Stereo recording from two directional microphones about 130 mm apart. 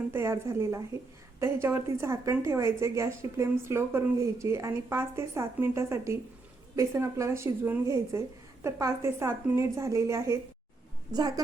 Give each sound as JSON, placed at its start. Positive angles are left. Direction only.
{"t": 0.1, "sound": "a woman's voice", "side_deg": -20}